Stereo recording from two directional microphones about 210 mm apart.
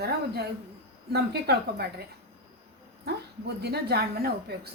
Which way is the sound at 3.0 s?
50° right (ahead or behind).